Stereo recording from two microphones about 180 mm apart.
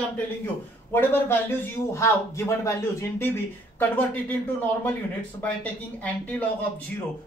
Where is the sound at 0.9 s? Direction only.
10° left (ahead or behind).